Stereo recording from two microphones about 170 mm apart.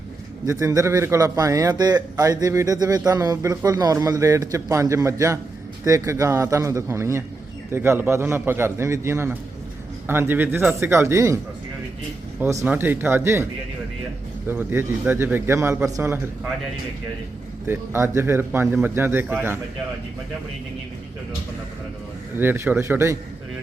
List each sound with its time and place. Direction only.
0.4 s a man's voice: 20° right (ahead or behind)
12.6 s a man's voice: 10° right (ahead or behind)
17.7 s a man's voice: 15° right (ahead or behind)
22.4 s a man's voice: 15° right (ahead or behind)